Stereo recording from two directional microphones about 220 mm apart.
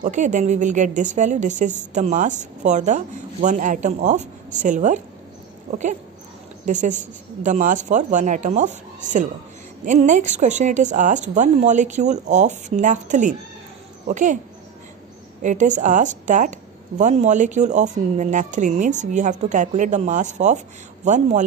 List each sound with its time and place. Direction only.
0.0 s a woman's voice: 35° right (ahead or behind)
15.4 s a woman's voice: 35° right (ahead or behind)